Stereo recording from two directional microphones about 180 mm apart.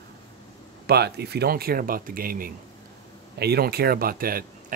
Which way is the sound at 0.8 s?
65° right (ahead or behind).